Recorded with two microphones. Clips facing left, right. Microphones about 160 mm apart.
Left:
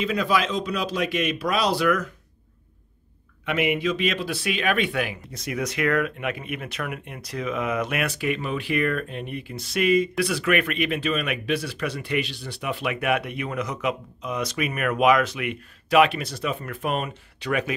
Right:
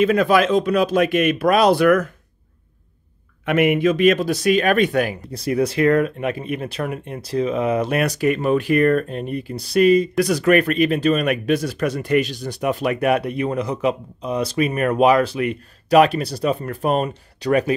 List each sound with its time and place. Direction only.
0.0 s speech: 55° right (ahead or behind)
3.4 s speech: 50° right (ahead or behind)